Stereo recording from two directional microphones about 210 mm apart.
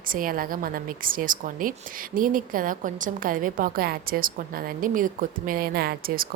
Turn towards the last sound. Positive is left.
turn(degrees=-45)  # may be behind; listen again after turning